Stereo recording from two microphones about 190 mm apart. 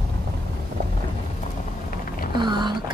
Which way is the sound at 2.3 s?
25° right (ahead or behind).